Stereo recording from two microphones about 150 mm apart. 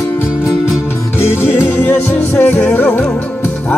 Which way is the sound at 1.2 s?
15° left (ahead or behind).